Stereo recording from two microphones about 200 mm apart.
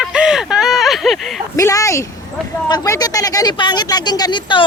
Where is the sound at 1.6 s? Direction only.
15° left (ahead or behind).